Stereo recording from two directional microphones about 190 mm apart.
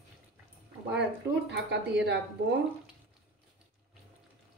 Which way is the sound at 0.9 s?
65° right (ahead or behind).